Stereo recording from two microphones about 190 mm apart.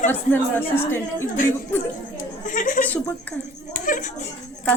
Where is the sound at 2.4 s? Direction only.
45° left (ahead or behind).